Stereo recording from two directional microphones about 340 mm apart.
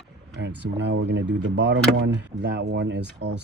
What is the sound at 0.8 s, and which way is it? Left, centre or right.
Speech, right.